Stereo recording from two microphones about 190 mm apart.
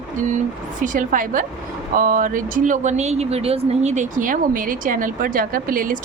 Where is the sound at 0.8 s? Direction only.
45° right (ahead or behind).